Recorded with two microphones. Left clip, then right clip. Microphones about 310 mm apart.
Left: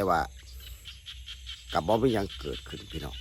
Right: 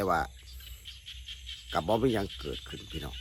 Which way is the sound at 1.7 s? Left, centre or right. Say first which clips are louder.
Left 2 dB; centre.